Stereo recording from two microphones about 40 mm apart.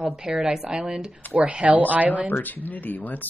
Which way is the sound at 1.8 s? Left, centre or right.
Right.